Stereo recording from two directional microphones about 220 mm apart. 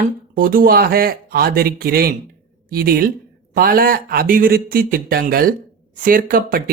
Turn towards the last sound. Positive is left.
turn(degrees=-40)  # may be behind; listen again after turning